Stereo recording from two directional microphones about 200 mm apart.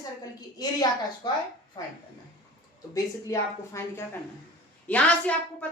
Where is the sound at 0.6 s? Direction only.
20° left (ahead or behind).